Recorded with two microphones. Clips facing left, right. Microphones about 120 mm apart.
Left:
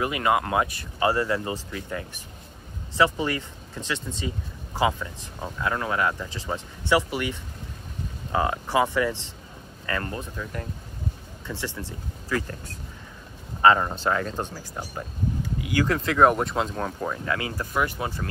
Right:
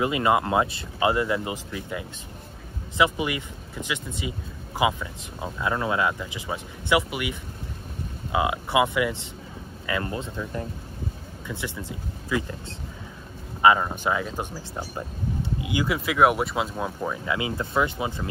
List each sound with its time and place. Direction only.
0.0 s speech: 20° right (ahead or behind)
11.4 s speech: 15° right (ahead or behind)
15.6 s speech: 15° right (ahead or behind)
17.3 s speech: 20° right (ahead or behind)